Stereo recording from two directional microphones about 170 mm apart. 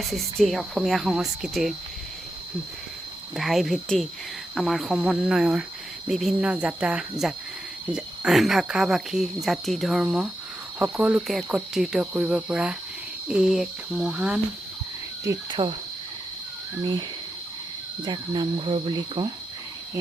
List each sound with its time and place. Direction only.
0.0 s speech: centre (ahead or behind)
3.3 s speech: centre (ahead or behind)
15.2 s cricket: 20° right (ahead or behind)
18.0 s cricket: 25° right (ahead or behind)